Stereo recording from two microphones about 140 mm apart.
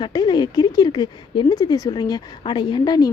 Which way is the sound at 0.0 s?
30° left (ahead or behind).